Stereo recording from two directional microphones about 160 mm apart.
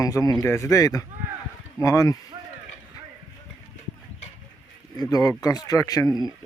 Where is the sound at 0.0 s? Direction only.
20° left (ahead or behind).